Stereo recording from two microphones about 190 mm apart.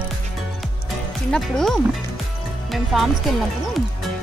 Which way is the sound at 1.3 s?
5° left (ahead or behind).